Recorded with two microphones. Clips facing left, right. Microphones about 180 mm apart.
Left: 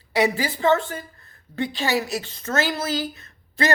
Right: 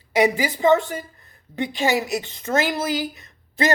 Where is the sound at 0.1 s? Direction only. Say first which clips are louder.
Right 2 dB; 15° right (ahead or behind).